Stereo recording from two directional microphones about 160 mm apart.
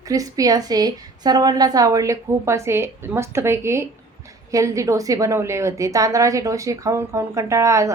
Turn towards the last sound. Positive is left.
turn(degrees=-20)  # may be behind; listen again after turning